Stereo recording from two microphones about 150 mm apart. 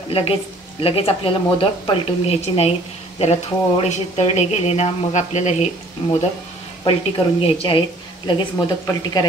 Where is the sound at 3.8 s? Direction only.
50° left (ahead or behind).